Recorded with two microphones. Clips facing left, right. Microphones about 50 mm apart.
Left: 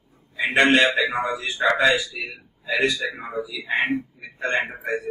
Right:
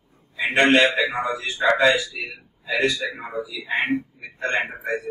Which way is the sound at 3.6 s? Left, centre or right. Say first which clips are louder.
Even; centre.